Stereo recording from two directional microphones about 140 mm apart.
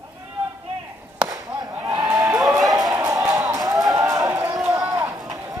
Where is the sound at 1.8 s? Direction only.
25° right (ahead or behind).